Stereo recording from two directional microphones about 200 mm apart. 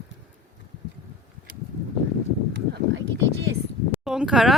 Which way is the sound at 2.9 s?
65° right (ahead or behind).